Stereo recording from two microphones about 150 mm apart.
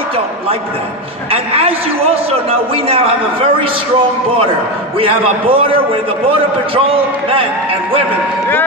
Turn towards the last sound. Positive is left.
turn(degrees=-35)  # may be behind; listen again after turning